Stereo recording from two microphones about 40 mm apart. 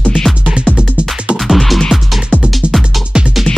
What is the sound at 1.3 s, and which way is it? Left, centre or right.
Music, centre.